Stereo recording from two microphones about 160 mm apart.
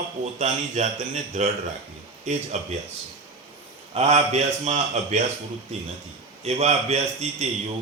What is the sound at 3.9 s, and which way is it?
A man's voice, 40° right (ahead or behind).